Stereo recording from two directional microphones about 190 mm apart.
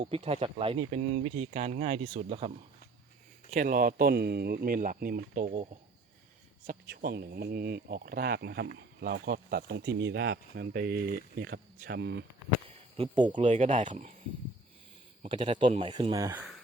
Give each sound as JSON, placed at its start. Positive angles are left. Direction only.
{"t": 0.0, "sound": "speech", "side_deg": -30}
{"t": 1.5, "sound": "speech", "side_deg": -40}
{"t": 3.5, "sound": "speech", "side_deg": -45}
{"t": 6.7, "sound": "speech", "side_deg": -55}
{"t": 12.6, "sound": "a sound", "side_deg": -30}
{"t": 13.4, "sound": "speech", "side_deg": -40}
{"t": 15.2, "sound": "speech", "side_deg": -25}
{"t": 16.1, "sound": "speech", "side_deg": -15}